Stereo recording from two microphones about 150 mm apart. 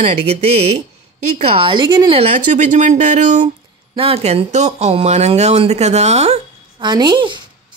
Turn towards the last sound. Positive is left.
turn(degrees=-30)  # may be behind; listen again after turning